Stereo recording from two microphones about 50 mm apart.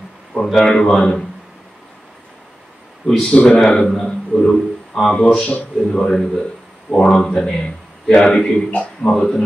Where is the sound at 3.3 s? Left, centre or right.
Left.